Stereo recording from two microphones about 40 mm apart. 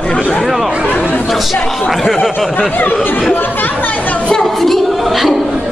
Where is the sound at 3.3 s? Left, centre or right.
Left.